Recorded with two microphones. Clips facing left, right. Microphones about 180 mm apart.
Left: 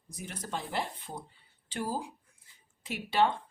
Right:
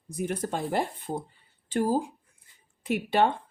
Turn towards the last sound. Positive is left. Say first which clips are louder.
# right 4 dB
turn(degrees=-55)  # may be behind; listen again after turning